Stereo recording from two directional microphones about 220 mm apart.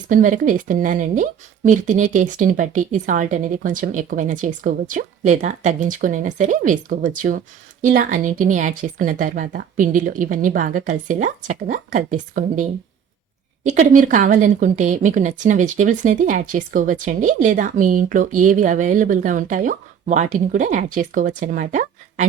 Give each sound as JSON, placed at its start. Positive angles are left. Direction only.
{"t": 0.1, "sound": "speech", "side_deg": -35}
{"t": 13.7, "sound": "speech", "side_deg": -35}